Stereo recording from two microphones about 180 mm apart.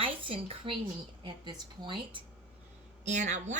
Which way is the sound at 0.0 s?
30° right (ahead or behind).